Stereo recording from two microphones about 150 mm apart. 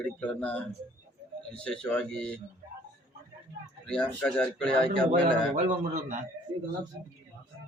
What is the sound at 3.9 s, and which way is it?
Speech, 5° left (ahead or behind).